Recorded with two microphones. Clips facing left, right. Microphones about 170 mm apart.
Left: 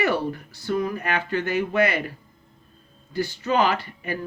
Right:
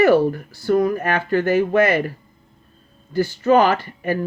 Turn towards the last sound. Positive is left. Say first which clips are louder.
# right 6 dB
turn(degrees=-45)  # may be behind; listen again after turning